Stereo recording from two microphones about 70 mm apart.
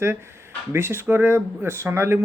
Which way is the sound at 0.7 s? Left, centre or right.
Right.